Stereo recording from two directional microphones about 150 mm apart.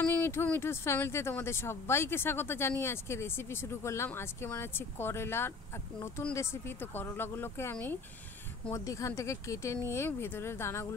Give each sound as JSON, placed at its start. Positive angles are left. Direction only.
{"t": 0.0, "sound": "speech", "side_deg": 15}